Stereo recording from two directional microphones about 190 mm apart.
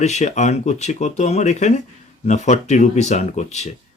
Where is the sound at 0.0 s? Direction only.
35° left (ahead or behind).